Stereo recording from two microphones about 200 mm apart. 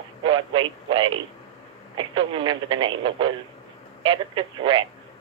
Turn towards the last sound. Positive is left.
turn(degrees=-25)  # may be behind; listen again after turning